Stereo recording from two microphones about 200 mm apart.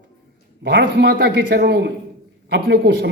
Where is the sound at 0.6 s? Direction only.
60° right (ahead or behind).